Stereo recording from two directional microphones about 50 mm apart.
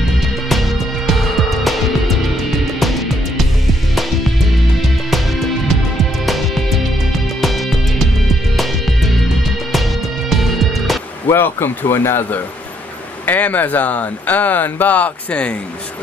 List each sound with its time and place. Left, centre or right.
0.5 s music: centre
5.1 s music: centre
11.3 s speech: left
13.2 s speech: left